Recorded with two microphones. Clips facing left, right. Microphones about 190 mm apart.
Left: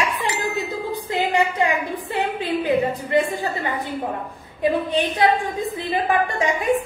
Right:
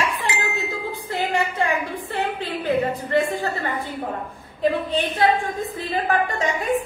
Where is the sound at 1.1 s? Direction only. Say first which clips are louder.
Left 3 dB; 15° left (ahead or behind).